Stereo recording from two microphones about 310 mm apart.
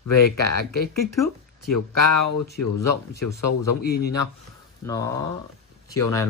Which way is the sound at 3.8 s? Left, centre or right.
Left.